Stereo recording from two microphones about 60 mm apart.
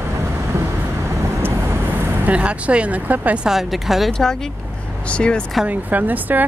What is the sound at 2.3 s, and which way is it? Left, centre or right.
Speech, right.